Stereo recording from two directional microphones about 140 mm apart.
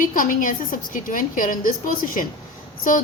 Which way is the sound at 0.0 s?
70° left (ahead or behind).